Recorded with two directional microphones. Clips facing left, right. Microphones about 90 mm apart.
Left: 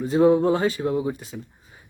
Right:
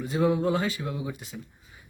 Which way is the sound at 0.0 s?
30° left (ahead or behind).